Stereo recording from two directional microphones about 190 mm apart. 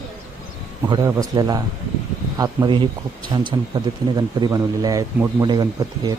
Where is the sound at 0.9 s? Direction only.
20° right (ahead or behind).